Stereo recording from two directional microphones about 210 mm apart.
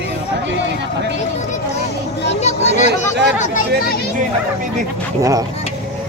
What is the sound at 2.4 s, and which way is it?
Speech, 30° left (ahead or behind).